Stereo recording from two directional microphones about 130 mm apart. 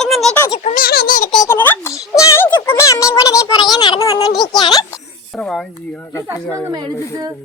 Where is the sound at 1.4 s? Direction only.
15° left (ahead or behind).